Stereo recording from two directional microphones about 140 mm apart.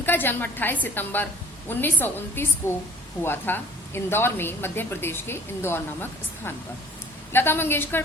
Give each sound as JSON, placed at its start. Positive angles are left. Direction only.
{"t": 0.0, "sound": "a woman's voice", "side_deg": 15}